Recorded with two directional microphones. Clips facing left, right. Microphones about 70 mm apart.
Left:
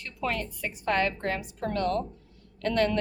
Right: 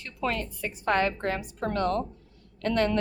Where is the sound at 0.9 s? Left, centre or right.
Right.